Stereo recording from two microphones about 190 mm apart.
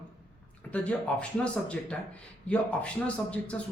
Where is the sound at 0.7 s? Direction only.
5° left (ahead or behind).